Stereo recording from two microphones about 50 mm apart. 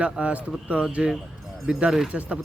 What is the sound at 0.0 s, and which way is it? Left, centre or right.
Speech, right.